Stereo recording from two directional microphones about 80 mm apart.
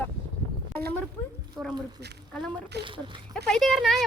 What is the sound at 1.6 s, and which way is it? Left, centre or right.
Speech, centre.